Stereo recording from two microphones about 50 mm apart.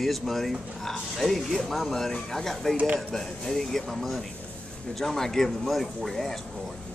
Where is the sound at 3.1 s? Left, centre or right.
Centre.